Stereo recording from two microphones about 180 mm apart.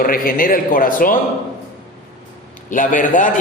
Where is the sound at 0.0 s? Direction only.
50° left (ahead or behind).